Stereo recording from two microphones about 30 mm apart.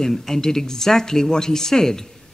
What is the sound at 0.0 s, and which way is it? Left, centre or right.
A man's voice, centre.